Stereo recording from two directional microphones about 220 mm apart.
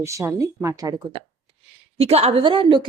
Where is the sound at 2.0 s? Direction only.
25° right (ahead or behind).